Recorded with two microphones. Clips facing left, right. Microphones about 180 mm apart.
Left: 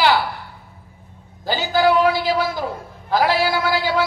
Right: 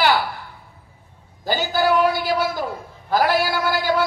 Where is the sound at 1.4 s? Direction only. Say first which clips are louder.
Left 2 dB; 45° right (ahead or behind).